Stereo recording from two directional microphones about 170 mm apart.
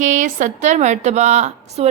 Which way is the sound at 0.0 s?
45° right (ahead or behind).